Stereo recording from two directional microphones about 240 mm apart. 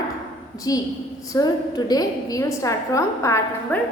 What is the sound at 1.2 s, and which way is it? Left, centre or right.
A woman's voice, centre.